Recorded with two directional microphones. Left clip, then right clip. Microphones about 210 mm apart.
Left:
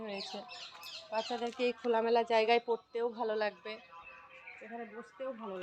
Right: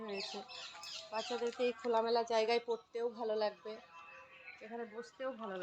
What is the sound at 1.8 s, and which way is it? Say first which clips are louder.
Speech: left 4 dB; 30° left (ahead or behind).